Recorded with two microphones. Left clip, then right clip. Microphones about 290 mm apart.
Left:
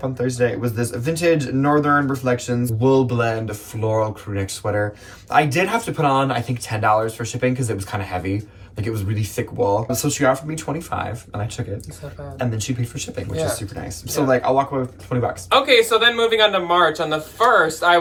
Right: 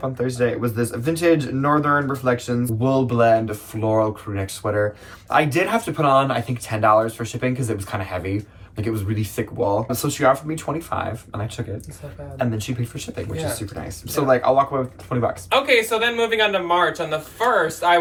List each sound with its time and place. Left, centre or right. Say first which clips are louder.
0.2 s speech: left 1 dB; centre
12.4 s speech: right 1 dB; centre
15.4 s speech: left 4 dB; centre